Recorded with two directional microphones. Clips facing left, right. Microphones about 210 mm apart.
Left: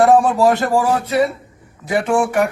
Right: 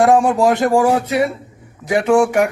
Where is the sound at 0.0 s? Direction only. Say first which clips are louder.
Even; 15° right (ahead or behind).